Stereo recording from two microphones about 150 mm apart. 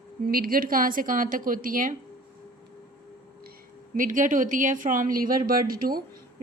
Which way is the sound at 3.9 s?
60° right (ahead or behind).